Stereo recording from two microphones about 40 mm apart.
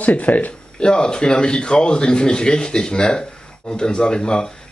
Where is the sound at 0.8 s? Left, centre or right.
Left.